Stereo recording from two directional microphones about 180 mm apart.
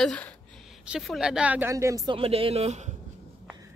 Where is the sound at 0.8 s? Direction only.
5° right (ahead or behind); by 2.9 s 40° right (ahead or behind).